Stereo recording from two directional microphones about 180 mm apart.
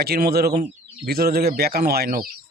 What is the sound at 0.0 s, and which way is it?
A man's voice, 60° right (ahead or behind).